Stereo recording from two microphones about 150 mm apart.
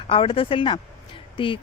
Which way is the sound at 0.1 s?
35° left (ahead or behind).